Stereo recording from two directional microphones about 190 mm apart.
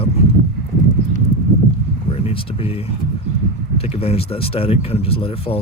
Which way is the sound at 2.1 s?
30° left (ahead or behind).